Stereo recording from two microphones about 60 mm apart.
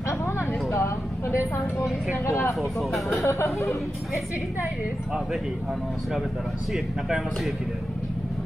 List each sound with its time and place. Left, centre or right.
0.2 s vehicle: left
2.6 s speech: centre
3.3 s a sound: left